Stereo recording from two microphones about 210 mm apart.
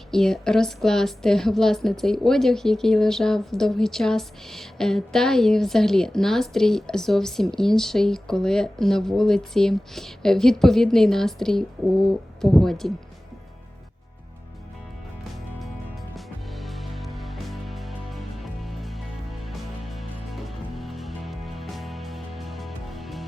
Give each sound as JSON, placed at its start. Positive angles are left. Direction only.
{"t": 0.1, "sound": "a woman's voice", "side_deg": 0}
{"t": 16.1, "sound": "music", "side_deg": 0}